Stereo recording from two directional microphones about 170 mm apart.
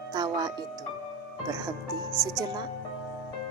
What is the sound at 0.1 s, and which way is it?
Music, 25° right (ahead or behind).